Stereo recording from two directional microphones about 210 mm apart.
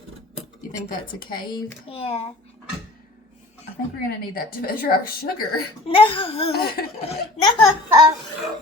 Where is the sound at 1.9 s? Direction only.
30° left (ahead or behind).